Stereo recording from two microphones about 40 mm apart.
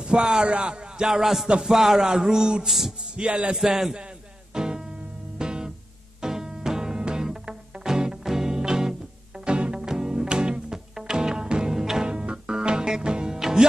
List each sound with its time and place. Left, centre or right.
0.0 s speech: centre
1.0 s speech: centre
3.2 s music: right
3.5 s speech: centre
4.6 s music: centre